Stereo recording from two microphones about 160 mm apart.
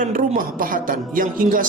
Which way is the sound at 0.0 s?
60° right (ahead or behind).